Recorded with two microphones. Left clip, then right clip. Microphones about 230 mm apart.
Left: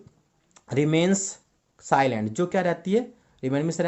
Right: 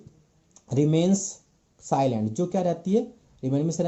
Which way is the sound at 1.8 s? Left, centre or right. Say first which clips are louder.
Left 3 dB; centre.